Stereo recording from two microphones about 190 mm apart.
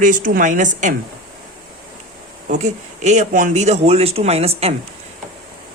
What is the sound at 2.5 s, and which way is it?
Speech, 40° right (ahead or behind).